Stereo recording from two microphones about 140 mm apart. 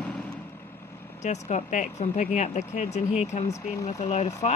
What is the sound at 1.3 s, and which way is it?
Speech, 55° left (ahead or behind).